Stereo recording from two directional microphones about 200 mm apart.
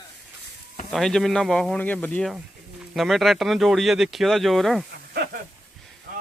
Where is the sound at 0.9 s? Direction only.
Centre (ahead or behind).